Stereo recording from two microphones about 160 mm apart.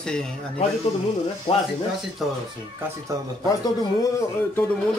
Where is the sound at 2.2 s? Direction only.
Centre (ahead or behind).